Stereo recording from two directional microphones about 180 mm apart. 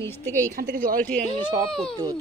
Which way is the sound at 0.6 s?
50° right (ahead or behind).